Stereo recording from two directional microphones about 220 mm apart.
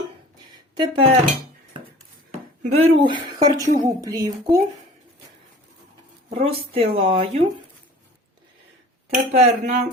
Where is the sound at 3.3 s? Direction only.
15° right (ahead or behind).